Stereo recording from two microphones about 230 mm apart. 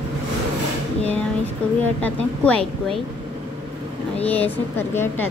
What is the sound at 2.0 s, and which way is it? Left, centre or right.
Speech, centre.